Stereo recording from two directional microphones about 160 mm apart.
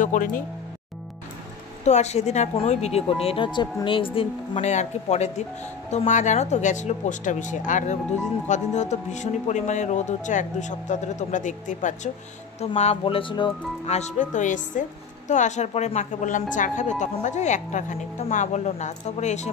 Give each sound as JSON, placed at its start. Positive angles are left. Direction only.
{"t": 0.0, "sound": "speech", "side_deg": 55}
{"t": 1.9, "sound": "a woman's voice", "side_deg": 45}
{"t": 13.8, "sound": "a woman's voice", "side_deg": 45}